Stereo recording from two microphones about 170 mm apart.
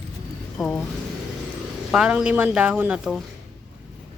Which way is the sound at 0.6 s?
5° left (ahead or behind).